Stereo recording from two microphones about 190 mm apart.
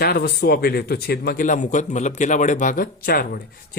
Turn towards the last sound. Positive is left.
turn(degrees=50)  # may be behind; listen again after turning